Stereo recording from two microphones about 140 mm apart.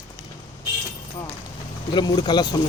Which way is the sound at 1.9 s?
30° left (ahead or behind).